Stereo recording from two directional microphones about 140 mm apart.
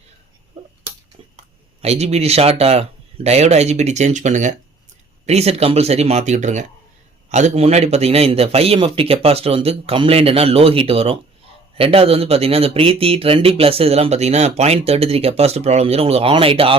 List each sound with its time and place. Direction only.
1.8 s speech: 50° right (ahead or behind)